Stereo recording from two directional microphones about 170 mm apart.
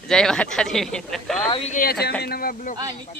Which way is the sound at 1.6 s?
50° left (ahead or behind).